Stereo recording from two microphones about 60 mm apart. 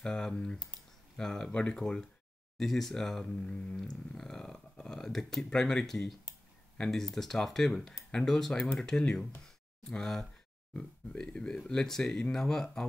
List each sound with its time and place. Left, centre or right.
0.0 s speech: centre
1.8 s speech: centre